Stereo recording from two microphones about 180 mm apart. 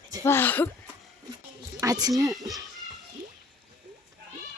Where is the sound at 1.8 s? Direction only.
20° right (ahead or behind).